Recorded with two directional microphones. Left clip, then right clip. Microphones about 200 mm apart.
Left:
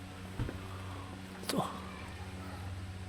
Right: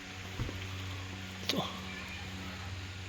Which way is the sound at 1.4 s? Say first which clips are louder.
Right 1 dB; 5° left (ahead or behind).